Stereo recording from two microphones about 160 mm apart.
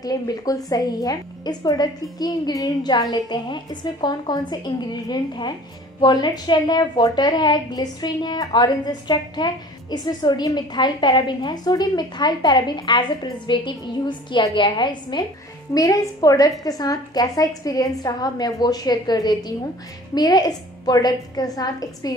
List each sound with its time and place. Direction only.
0.0 s a woman's voice: 25° left (ahead or behind)